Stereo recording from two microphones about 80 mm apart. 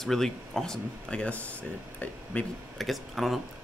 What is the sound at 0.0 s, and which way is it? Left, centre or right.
Speech, centre.